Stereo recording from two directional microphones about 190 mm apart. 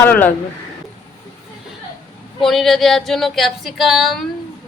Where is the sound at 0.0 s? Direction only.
10° left (ahead or behind).